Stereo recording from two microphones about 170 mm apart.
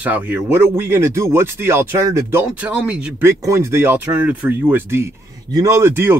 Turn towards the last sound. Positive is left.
turn(degrees=-15)  # may be behind; listen again after turning